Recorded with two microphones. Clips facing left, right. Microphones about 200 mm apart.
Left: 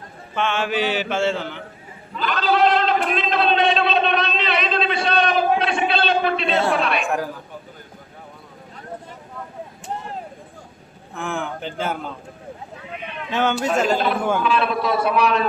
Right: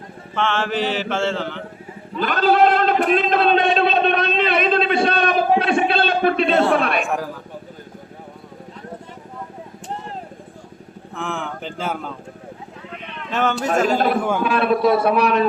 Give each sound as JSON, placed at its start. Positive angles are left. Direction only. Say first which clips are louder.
{"t": 0.3, "sound": "mantra", "louder": "right 1 dB", "side_deg": 15}
{"t": 2.2, "sound": "a sound", "louder": "right 3 dB", "side_deg": -50}
{"t": 11.1, "sound": "speech", "louder": "left 1 dB", "side_deg": 5}
{"t": 12.9, "sound": "a sound", "louder": "left 1 dB", "side_deg": 5}
{"t": 13.7, "sound": "speech", "louder": "right 3 dB", "side_deg": -5}
{"t": 14.4, "sound": "a man's voice", "louder": "right 4 dB", "side_deg": -50}